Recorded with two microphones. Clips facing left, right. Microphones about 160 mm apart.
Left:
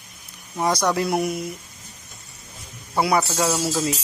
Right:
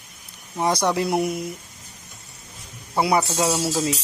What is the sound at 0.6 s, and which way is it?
Speech, 25° right (ahead or behind).